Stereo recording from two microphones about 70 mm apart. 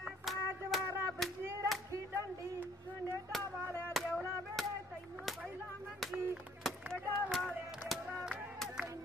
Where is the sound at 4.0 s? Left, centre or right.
Centre.